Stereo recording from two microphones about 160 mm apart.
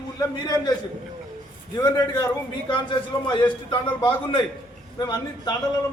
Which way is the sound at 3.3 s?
30° left (ahead or behind).